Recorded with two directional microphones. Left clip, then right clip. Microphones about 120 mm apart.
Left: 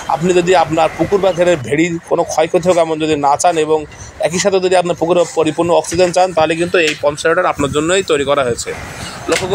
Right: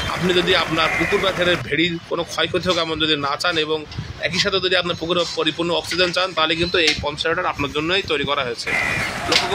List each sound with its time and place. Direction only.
0.3 s a man's voice: 30° left (ahead or behind)
6.6 s speech: 15° left (ahead or behind)
7.1 s speech: 35° left (ahead or behind)